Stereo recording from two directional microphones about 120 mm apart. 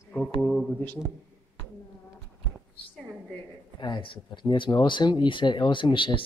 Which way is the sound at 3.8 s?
45° left (ahead or behind).